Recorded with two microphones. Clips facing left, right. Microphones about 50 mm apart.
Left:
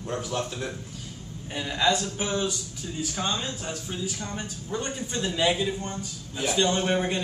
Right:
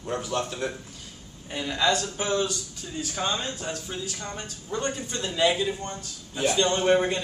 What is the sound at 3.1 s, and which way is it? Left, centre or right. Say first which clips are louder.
Speech: right 2 dB; centre.